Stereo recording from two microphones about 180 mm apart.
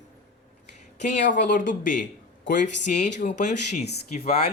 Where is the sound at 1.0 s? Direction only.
45° left (ahead or behind).